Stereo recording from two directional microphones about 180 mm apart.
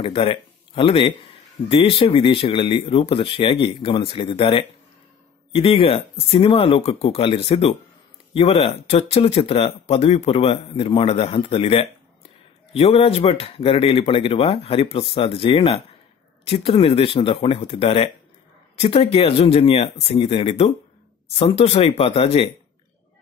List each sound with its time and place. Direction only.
0.0 s a man's voice: 30° left (ahead or behind)